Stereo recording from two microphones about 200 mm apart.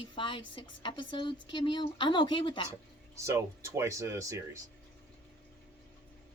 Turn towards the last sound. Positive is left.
turn(degrees=-15)  # may be behind; listen again after turning